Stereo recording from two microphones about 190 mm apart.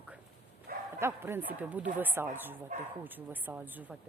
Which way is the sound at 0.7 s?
50° right (ahead or behind).